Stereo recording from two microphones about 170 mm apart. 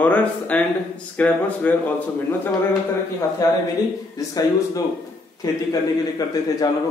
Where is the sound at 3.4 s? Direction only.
20° left (ahead or behind).